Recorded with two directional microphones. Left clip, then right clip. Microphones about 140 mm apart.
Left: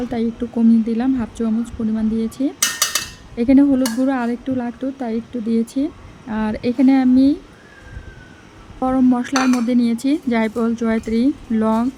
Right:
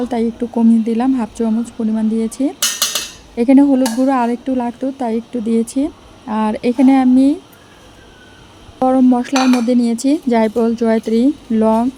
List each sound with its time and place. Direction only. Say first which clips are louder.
0.1 s speech: right 4 dB; 35° right (ahead or behind)
8.8 s speech: right 5 dB; 30° right (ahead or behind)